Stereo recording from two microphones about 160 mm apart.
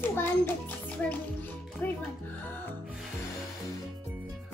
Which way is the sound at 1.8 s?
10° left (ahead or behind).